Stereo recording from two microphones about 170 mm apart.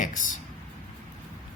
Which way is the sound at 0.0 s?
50° left (ahead or behind).